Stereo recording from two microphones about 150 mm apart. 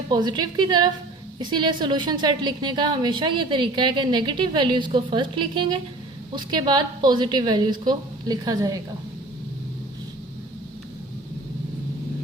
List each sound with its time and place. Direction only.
0.1 s a woman's voice: 30° right (ahead or behind)